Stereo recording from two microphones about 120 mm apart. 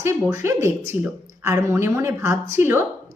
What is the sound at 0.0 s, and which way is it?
A woman's voice, 25° right (ahead or behind).